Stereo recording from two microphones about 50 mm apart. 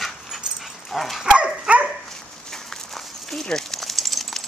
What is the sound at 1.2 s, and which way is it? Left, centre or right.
Dog, right.